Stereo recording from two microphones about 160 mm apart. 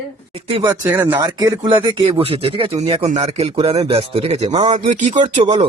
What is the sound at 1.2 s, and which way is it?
Speech, 25° right (ahead or behind).